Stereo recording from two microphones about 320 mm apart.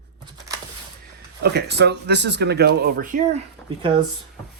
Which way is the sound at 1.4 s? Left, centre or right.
Right.